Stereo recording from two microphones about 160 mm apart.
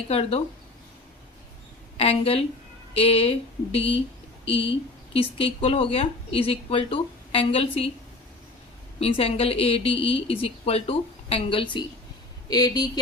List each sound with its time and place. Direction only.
0.1 s speech: 40° left (ahead or behind)
2.0 s speech: 40° left (ahead or behind)
9.0 s speech: 35° left (ahead or behind)